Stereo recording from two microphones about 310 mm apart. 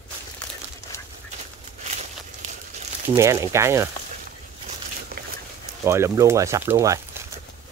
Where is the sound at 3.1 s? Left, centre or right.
Centre.